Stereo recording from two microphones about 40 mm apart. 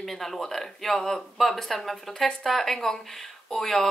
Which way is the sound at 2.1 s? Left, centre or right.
Centre.